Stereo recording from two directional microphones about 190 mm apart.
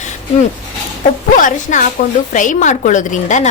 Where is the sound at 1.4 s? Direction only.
40° left (ahead or behind).